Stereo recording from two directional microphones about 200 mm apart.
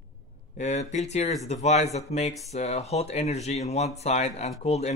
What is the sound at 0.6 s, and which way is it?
Speech, 35° left (ahead or behind).